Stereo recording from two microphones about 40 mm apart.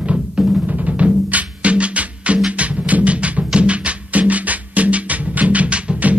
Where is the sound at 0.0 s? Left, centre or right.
Right.